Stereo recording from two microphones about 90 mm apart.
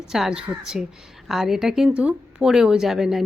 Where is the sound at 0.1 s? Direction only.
5° right (ahead or behind).